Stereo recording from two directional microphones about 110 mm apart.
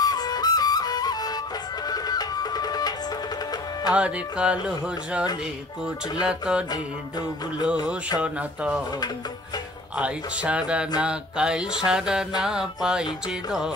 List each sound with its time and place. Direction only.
0.0 s flute: 35° left (ahead or behind)
1.9 s music: 35° left (ahead or behind)
3.9 s mantra: 10° right (ahead or behind)
6.2 s mantra: 5° right (ahead or behind)
6.7 s music: 40° left (ahead or behind)
8.2 s mantra: 10° right (ahead or behind)
9.9 s mantra: 10° right (ahead or behind)